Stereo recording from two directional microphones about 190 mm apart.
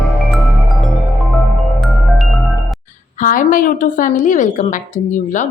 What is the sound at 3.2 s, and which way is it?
A woman's voice, 45° left (ahead or behind).